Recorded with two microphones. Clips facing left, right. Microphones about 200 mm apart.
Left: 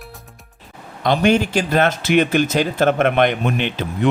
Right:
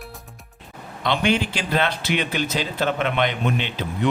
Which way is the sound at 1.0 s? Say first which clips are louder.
Left 6 dB; 45° left (ahead or behind).